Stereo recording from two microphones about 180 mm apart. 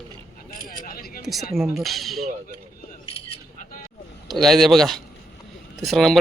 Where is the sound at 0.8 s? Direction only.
55° left (ahead or behind).